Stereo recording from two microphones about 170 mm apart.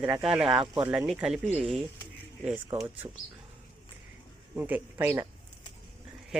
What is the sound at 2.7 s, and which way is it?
Speech, 15° right (ahead or behind).